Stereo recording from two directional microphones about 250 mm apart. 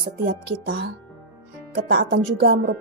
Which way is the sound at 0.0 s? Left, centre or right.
Right.